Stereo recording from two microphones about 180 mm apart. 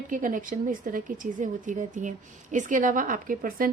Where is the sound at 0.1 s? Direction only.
45° right (ahead or behind).